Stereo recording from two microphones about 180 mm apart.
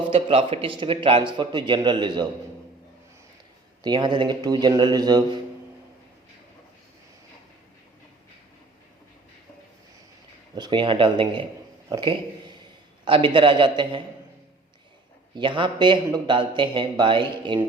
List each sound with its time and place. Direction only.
0.1 s a man's voice: 30° right (ahead or behind)
3.8 s a man's voice: 25° right (ahead or behind)
10.5 s a man's voice: 25° right (ahead or behind)
15.4 s a man's voice: 25° right (ahead or behind)